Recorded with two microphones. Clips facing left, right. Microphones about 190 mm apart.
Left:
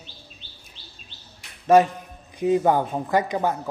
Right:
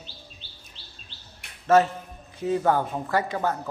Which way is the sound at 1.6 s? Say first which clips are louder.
Left 3 dB; 15° left (ahead or behind).